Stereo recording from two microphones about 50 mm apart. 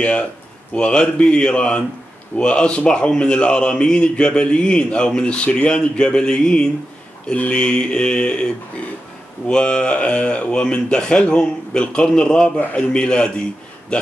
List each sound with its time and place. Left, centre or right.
0.0 s a man's voice: left